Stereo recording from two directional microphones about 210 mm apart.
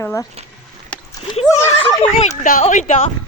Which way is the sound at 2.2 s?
35° left (ahead or behind).